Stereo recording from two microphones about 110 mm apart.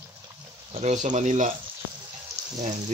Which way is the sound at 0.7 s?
85° right.